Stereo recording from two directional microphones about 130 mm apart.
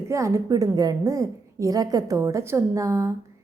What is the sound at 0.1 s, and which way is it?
A woman's voice, 25° right (ahead or behind).